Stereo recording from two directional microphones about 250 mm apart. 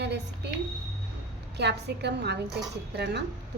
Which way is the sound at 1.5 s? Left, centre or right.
Right.